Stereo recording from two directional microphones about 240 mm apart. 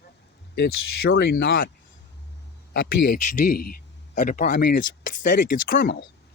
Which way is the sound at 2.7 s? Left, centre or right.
Left.